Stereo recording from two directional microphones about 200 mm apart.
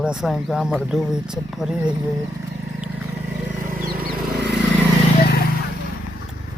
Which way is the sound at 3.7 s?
45° right (ahead or behind).